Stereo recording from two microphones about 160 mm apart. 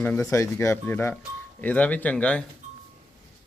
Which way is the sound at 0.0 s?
10° left (ahead or behind).